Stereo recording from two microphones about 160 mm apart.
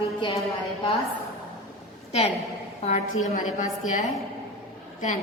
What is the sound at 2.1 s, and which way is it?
Speech, 40° left (ahead or behind).